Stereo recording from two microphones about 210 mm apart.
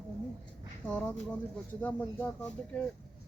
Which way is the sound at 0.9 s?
5° left (ahead or behind).